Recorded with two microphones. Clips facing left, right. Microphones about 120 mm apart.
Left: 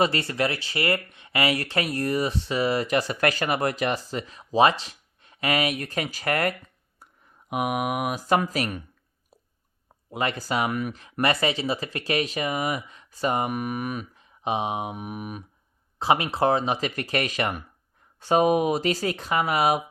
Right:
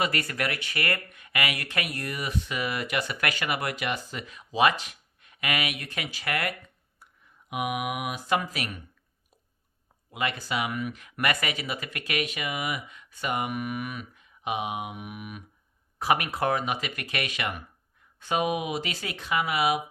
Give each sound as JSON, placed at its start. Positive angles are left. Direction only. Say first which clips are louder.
{"t": 0.0, "sound": "speech", "louder": "left 5 dB", "side_deg": 30}
{"t": 7.0, "sound": "a sound", "louder": "left 3 dB", "side_deg": 40}
{"t": 7.5, "sound": "speech", "louder": "left 4 dB", "side_deg": 40}
{"t": 10.1, "sound": "speech", "louder": "left 4 dB", "side_deg": 35}
{"t": 10.9, "sound": "speech", "louder": "left 4 dB", "side_deg": 30}
{"t": 16.0, "sound": "speech", "louder": "left 4 dB", "side_deg": 25}